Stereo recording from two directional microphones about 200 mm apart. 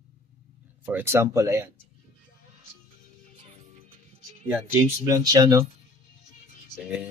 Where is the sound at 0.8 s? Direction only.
10° right (ahead or behind).